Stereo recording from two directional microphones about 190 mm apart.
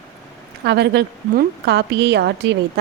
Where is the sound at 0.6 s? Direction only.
60° right (ahead or behind).